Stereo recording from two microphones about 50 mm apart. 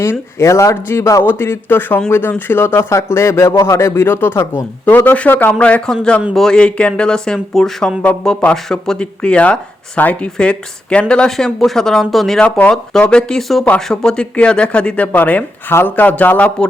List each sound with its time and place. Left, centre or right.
0.0 s speech: left
0.9 s speech: left
1.2 s speech: left
2.9 s a man's voice: left
4.9 s speech: left
5.5 s speech: left; by 6.6 s centre
6.6 s speech: left
11.3 s speech: centre
12.4 s speech: left
12.7 s speech: centre
15.1 s speech: left
16.0 s speech: left
16.6 s a man's voice: centre